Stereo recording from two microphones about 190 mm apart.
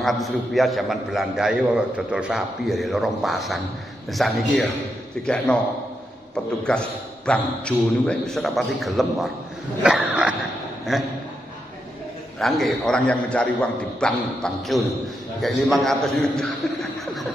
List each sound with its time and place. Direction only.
0.0 s a man's voice: centre (ahead or behind)
12.4 s a man's voice: centre (ahead or behind)